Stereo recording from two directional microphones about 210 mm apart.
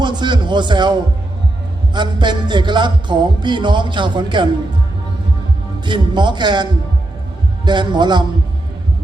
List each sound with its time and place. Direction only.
0.0 s a sound: 20° right (ahead or behind)
1.9 s music: 20° right (ahead or behind)
5.8 s music: 20° right (ahead or behind)